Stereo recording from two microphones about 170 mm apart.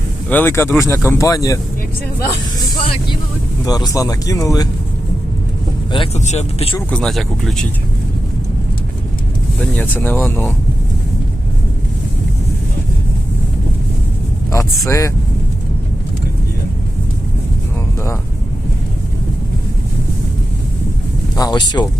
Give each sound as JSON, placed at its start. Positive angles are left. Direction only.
{"t": 0.3, "sound": "speech", "side_deg": 10}
{"t": 2.6, "sound": "speech", "side_deg": 25}
{"t": 6.1, "sound": "speech", "side_deg": 40}
{"t": 6.9, "sound": "speech", "side_deg": 0}
{"t": 9.6, "sound": "speech", "side_deg": 10}
{"t": 14.5, "sound": "speech", "side_deg": 15}
{"t": 21.3, "sound": "speech", "side_deg": 25}